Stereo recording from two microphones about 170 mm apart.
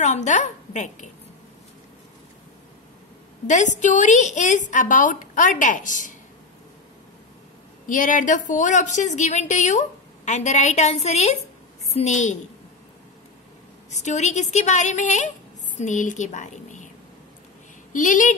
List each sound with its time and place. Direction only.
0.0 s a woman's voice: 45° left (ahead or behind)
3.4 s a woman's voice: 45° left (ahead or behind)
7.8 s a woman's voice: 50° left (ahead or behind)
13.8 s a woman's voice: 40° left (ahead or behind)
17.9 s a woman's voice: 50° left (ahead or behind)